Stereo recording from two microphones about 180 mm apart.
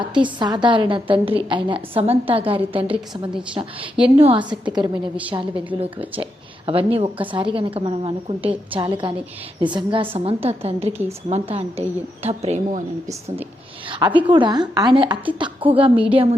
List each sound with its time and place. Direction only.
0.0 s a woman's voice: 25° right (ahead or behind)
4.2 s a woman's voice: 30° right (ahead or behind)
14.3 s a woman's voice: 25° right (ahead or behind)